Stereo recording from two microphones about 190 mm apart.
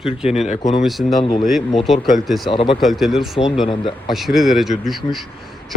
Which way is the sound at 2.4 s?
25° left (ahead or behind).